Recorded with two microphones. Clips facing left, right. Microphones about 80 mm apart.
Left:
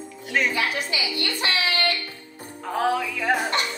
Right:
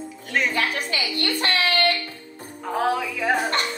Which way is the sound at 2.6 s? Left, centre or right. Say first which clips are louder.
Even; centre.